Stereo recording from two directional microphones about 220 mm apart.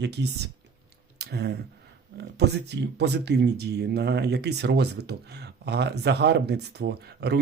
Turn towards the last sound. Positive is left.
turn(degrees=-50)  # may be behind; listen again after turning